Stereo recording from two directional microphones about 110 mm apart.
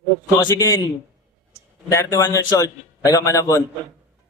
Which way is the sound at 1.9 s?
30° left (ahead or behind).